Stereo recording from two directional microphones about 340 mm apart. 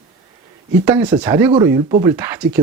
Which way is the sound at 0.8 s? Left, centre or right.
Centre.